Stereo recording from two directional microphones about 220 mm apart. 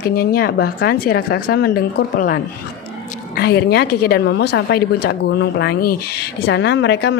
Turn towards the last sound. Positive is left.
turn(degrees=50)  # may be behind; listen again after turning